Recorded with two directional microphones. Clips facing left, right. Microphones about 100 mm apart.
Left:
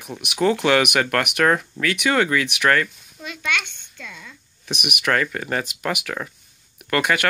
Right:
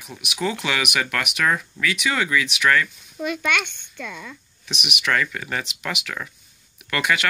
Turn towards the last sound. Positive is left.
turn(degrees=45)  # may be behind; listen again after turning